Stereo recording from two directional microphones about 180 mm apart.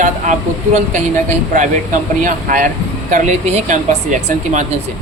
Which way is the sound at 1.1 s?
45° right (ahead or behind).